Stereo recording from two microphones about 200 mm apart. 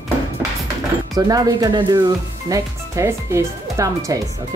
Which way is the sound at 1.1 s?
20° right (ahead or behind).